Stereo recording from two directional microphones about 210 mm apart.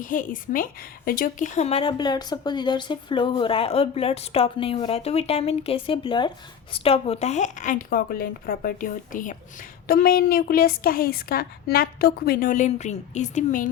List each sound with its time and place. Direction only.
0.0 s a woman's voice: 40° left (ahead or behind)